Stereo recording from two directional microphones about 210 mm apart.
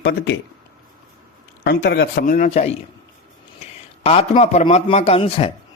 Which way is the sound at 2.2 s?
35° left (ahead or behind).